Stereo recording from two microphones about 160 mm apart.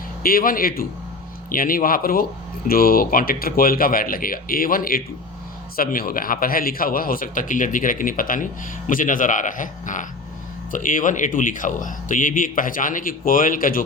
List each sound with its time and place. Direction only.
0.2 s speech: 65° left (ahead or behind)